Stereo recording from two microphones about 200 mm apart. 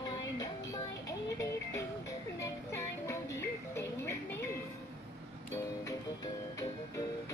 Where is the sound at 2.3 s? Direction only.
15° left (ahead or behind).